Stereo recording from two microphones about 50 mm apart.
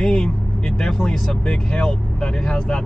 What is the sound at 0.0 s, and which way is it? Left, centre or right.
Vehicle, centre.